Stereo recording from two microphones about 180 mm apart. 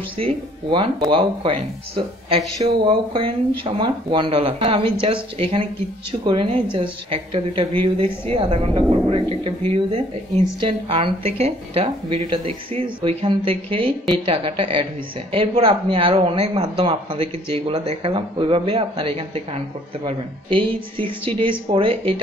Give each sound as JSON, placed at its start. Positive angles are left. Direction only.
{"t": 0.2, "sound": "a woman's voice", "side_deg": -25}